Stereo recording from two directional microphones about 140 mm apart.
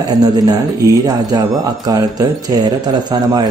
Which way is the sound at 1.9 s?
30° right (ahead or behind).